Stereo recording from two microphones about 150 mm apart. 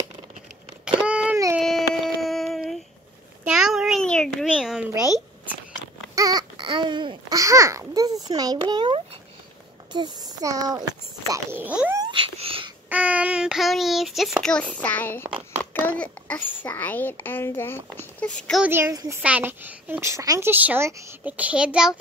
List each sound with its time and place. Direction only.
1.0 s a sound: 5° right (ahead or behind)
4.5 s a sound: 5° right (ahead or behind)
6.1 s babbling: 25° right (ahead or behind)
9.9 s speech: 30° right (ahead or behind)
11.6 s a child's voice: 10° right (ahead or behind)
12.0 s a sound: 35° right (ahead or behind)
12.9 s a child's voice: 10° right (ahead or behind); by 18.3 s 15° left (ahead or behind)
18.7 s speech: 20° right (ahead or behind)
19.2 s a child's voice: 10° right (ahead or behind)